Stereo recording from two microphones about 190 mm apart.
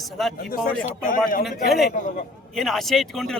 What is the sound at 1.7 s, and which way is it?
Speech, centre (ahead or behind).